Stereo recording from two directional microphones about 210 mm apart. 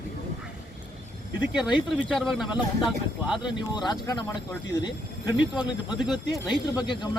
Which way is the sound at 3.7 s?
20° left (ahead or behind).